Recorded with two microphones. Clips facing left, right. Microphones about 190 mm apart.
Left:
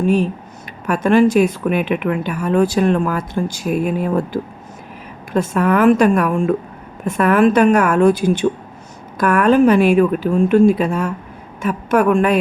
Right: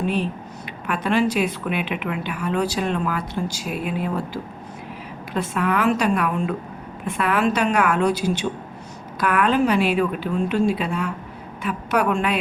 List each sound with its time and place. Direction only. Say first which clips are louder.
0.0 s speech: left 7 dB; 45° left (ahead or behind)